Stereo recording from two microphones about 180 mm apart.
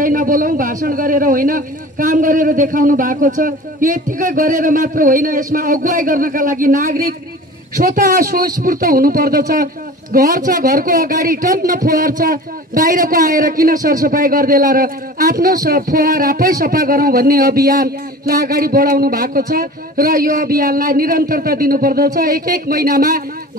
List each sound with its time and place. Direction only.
0.0 s a man's voice: 50° right (ahead or behind)